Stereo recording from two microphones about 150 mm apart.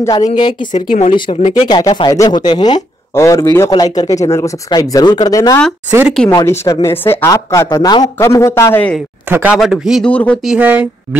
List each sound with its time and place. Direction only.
0.0 s speech: 25° left (ahead or behind)
0.7 s speech: 55° left (ahead or behind)
1.6 s speech: 30° left (ahead or behind)
5.9 s speech: 10° right (ahead or behind)
6.3 s speech: 15° left (ahead or behind)
9.3 s speech: 10° right (ahead or behind)
10.1 s speech: 10° left (ahead or behind)
10.4 s speech: 10° right (ahead or behind)